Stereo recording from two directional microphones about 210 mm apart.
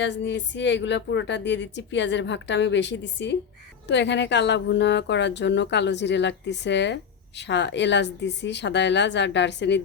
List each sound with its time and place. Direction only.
0.0 s speech: 55° left (ahead or behind)